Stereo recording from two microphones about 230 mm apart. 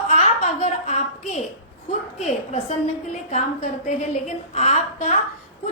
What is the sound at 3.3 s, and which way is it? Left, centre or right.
A woman's voice, left.